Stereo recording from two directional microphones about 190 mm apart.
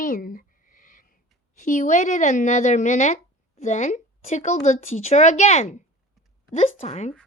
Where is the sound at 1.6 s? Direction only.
40° left (ahead or behind).